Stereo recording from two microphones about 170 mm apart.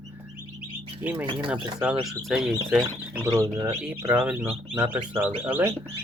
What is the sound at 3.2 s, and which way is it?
Speech, 15° right (ahead or behind).